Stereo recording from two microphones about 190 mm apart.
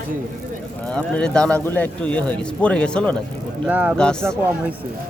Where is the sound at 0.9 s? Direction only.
5° left (ahead or behind).